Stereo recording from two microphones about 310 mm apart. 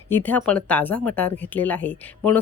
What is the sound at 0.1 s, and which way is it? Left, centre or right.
Speech, centre.